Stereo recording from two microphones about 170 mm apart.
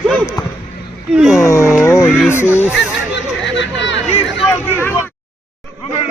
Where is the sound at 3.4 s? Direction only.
90° left.